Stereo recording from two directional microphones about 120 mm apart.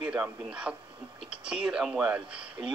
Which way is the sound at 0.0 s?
10° right (ahead or behind).